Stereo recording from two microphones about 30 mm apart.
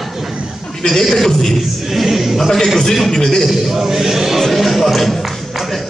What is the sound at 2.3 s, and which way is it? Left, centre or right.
Speech, centre.